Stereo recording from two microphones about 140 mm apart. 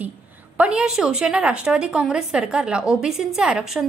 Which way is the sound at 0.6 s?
10° right (ahead or behind).